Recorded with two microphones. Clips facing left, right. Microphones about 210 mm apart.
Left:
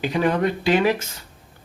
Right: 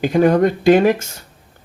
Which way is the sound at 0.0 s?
45° right (ahead or behind).